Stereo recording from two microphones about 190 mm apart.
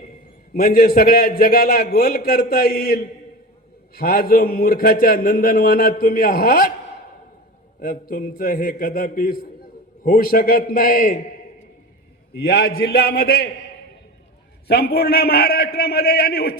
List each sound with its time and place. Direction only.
0.5 s a man's voice: 50° left (ahead or behind)
7.8 s a man's voice: 50° left (ahead or behind)
12.5 s a man's voice: 50° left (ahead or behind)
14.7 s a man's voice: 55° left (ahead or behind)